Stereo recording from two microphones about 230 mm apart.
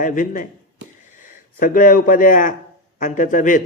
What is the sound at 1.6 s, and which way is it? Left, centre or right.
Speech, left.